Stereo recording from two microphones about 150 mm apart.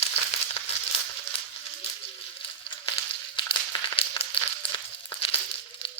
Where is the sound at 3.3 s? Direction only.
35° left (ahead or behind).